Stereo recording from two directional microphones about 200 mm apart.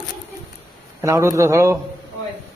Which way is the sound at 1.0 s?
15° right (ahead or behind).